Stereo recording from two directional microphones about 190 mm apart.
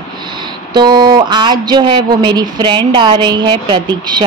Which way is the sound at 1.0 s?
25° right (ahead or behind).